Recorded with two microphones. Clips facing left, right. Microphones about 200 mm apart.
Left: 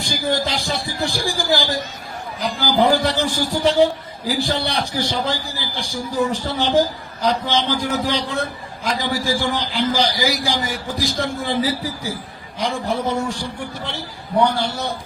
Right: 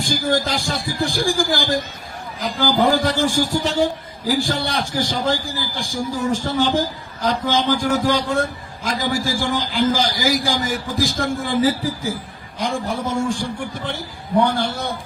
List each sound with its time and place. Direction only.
0.0 s a man's voice: 50° right (ahead or behind)